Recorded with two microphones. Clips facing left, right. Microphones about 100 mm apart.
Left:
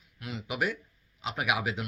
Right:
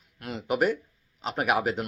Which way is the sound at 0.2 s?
45° right (ahead or behind).